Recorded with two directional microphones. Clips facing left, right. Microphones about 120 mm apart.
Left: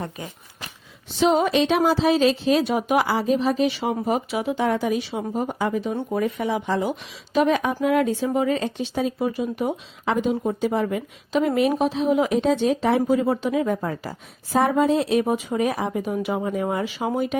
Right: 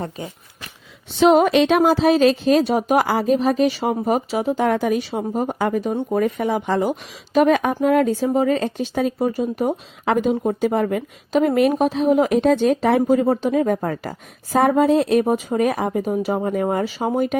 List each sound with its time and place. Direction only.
1.2 s speech: 60° right (ahead or behind); by 17.1 s 40° right (ahead or behind)